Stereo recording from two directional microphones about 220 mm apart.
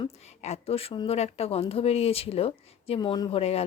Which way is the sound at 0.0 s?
30° left (ahead or behind).